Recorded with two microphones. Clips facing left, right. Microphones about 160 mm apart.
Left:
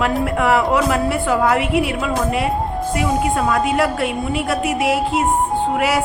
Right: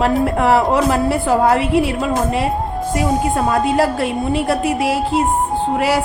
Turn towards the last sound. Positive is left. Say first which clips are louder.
# right 1 dB
turn(degrees=-35)  # may be behind; listen again after turning